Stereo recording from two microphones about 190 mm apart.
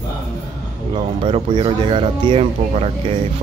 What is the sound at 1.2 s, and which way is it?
Speech, 25° right (ahead or behind).